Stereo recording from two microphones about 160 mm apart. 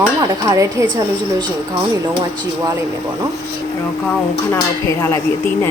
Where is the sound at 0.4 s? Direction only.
20° right (ahead or behind).